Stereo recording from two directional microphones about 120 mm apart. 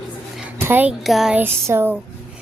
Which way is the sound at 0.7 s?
15° right (ahead or behind).